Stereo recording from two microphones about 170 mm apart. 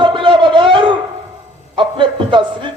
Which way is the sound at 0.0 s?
30° right (ahead or behind).